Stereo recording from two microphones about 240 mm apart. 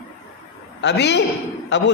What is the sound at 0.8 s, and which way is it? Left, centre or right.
A man's voice, left.